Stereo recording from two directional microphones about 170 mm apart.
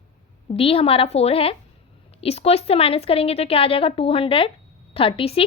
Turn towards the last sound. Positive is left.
turn(degrees=35)  # may be behind; listen again after turning